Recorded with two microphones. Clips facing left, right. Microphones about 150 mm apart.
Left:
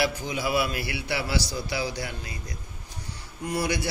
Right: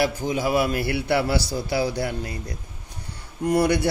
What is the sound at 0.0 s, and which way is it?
Speech, 45° right (ahead or behind).